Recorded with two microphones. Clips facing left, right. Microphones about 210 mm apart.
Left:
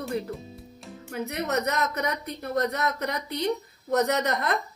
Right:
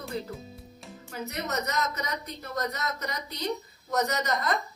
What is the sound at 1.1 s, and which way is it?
A woman's voice, 60° left (ahead or behind).